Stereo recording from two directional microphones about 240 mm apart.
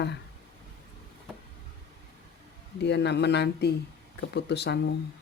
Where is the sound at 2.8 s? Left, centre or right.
Left.